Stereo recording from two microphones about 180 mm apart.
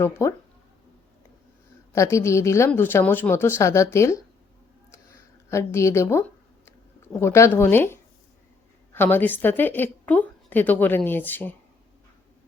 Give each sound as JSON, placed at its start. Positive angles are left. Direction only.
{"t": 0.0, "sound": "a woman's voice", "side_deg": 15}
{"t": 1.9, "sound": "a woman's voice", "side_deg": 15}
{"t": 5.5, "sound": "a woman's voice", "side_deg": 15}